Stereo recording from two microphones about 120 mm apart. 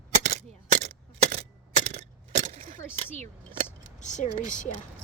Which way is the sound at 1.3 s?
70° right (ahead or behind).